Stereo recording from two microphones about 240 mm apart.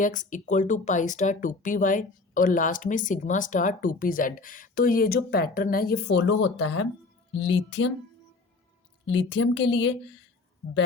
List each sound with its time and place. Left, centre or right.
0.0 s a woman's voice: left
9.0 s a woman's voice: left